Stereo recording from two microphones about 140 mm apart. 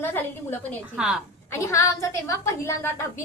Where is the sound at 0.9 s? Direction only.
5° right (ahead or behind).